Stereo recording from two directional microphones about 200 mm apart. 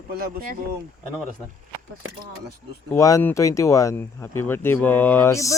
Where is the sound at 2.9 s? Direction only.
15° left (ahead or behind).